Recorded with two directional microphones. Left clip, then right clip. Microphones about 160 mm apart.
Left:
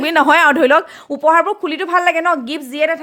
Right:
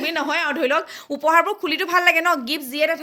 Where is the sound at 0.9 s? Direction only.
25° left (ahead or behind).